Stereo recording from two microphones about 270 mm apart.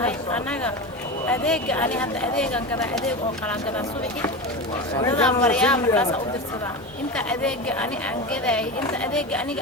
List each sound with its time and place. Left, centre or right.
1.3 s speech: centre
7.3 s speech: centre